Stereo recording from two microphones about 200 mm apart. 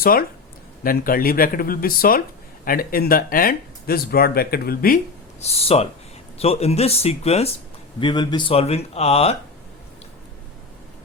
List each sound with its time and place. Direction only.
0.0 s speech: 45° left (ahead or behind)
5.4 s speech: 30° left (ahead or behind)